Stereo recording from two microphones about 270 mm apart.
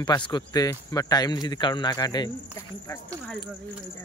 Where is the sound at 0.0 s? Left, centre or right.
Centre.